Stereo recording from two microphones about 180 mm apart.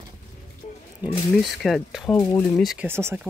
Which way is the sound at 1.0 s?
10° right (ahead or behind).